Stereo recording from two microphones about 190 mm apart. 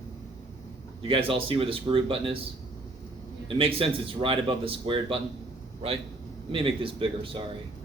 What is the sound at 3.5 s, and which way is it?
Speech, 30° right (ahead or behind).